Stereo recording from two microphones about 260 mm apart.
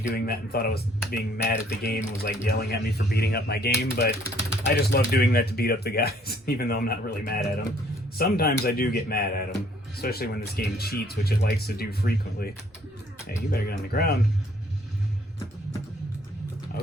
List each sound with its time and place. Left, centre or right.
0.0 s speech: left
13.5 s speech: left